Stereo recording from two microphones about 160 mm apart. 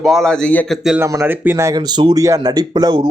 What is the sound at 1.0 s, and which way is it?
Speech, 15° right (ahead or behind).